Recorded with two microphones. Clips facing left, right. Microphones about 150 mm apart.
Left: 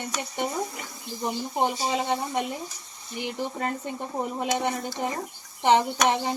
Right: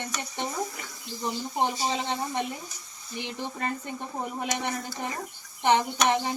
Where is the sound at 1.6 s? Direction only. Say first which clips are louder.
Left 3 dB; 15° left (ahead or behind).